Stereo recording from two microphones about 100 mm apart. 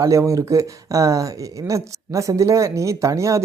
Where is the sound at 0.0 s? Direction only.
30° right (ahead or behind).